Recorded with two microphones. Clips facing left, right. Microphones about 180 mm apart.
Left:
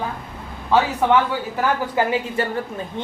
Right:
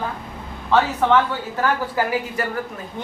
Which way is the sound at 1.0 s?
10° left (ahead or behind).